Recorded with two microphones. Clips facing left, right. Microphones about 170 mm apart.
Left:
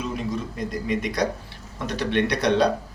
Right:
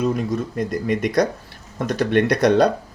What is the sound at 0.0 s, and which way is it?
Cutlery, 50° right (ahead or behind).